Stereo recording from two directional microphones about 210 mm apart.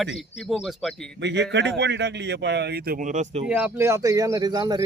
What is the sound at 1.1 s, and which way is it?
Speech, 55° right (ahead or behind).